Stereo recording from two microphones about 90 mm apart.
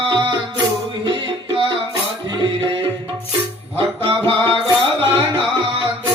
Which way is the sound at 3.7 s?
70° right (ahead or behind).